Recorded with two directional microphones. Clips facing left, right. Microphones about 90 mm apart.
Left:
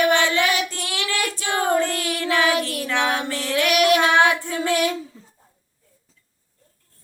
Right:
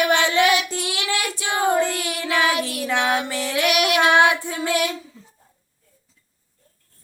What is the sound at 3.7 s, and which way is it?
Child singing, 35° left (ahead or behind).